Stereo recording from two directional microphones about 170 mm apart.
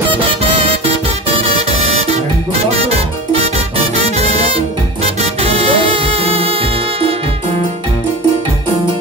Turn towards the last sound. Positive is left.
turn(degrees=-35)  # may be behind; listen again after turning